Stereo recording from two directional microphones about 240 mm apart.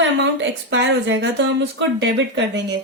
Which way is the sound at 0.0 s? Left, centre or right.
Right.